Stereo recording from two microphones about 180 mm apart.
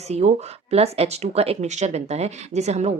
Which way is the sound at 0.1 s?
40° right (ahead or behind).